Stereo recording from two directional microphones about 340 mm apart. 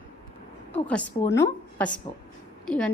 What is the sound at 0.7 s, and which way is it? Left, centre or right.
A woman's voice, centre.